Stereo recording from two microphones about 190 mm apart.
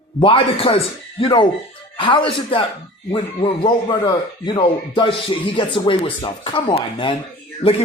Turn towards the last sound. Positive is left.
turn(degrees=30)  # may be behind; listen again after turning